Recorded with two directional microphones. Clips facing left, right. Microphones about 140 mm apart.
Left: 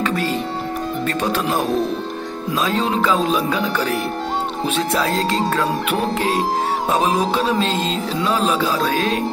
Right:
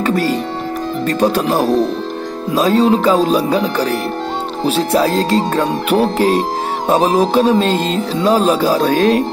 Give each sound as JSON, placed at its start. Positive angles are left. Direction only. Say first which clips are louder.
{"t": 0.0, "sound": "music", "louder": "right 5 dB", "side_deg": -40}
{"t": 1.0, "sound": "speech", "louder": "right 8 dB", "side_deg": -35}
{"t": 7.7, "sound": "music", "louder": "right 5 dB", "side_deg": -45}